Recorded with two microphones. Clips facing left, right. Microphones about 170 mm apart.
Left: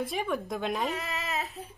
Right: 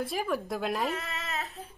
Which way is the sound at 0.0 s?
Centre (ahead or behind).